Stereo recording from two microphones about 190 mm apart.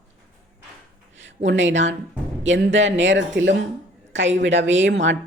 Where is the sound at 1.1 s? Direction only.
75° right (ahead or behind).